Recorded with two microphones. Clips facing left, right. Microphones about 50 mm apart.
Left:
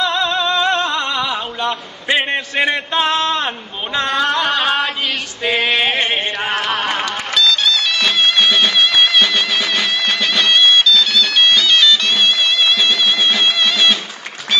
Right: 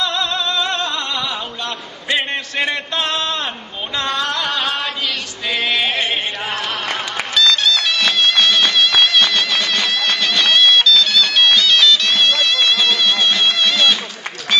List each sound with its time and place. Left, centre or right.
0.0 s music: centre
1.0 s a sound: centre
5.9 s music: left
7.3 s music: centre